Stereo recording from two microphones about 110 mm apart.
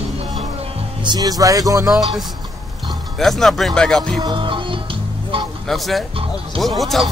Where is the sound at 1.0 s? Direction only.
35° right (ahead or behind).